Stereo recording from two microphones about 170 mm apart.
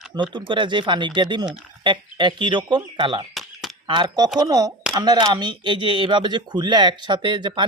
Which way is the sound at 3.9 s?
25° right (ahead or behind).